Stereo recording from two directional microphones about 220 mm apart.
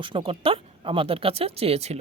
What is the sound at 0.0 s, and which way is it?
Speech, 25° right (ahead or behind).